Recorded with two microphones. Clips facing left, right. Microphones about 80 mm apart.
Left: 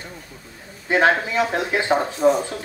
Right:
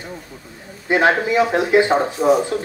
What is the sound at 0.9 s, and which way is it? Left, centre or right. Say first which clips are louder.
Speech: right 2 dB; centre.